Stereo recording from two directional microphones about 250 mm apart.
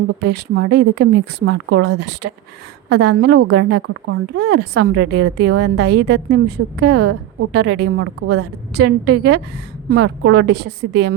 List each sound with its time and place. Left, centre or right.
0.2 s a woman's voice: right
3.8 s a woman's voice: right
9.9 s a woman's voice: right
10.3 s a woman's voice: right